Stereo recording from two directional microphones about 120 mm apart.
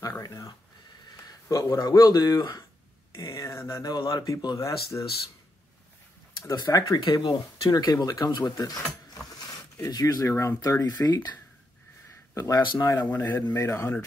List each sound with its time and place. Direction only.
0.0 s a sound: 30° left (ahead or behind)
1.0 s speech: 30° left (ahead or behind)
6.3 s speech: 35° left (ahead or behind)
9.8 s speech: 30° left (ahead or behind)
12.4 s speech: 30° left (ahead or behind)
12.9 s a man's voice: 15° left (ahead or behind)